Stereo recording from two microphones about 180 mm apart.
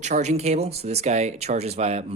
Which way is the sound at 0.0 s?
40° right (ahead or behind).